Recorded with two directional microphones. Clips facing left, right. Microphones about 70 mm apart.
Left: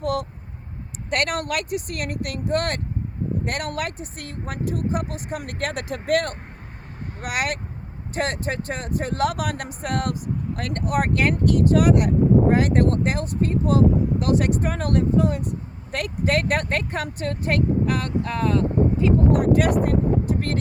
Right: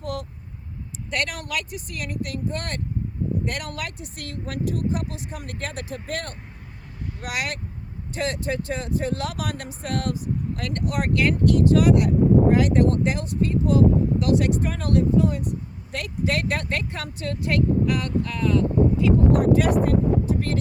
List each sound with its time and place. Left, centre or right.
0.0 s vehicle: left
1.1 s speech: left
7.2 s speech: left
19.5 s speech: left